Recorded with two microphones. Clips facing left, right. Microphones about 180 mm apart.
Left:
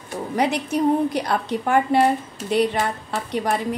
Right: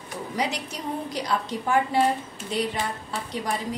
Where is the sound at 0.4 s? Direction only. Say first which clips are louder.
Left 10 dB; 55° left (ahead or behind).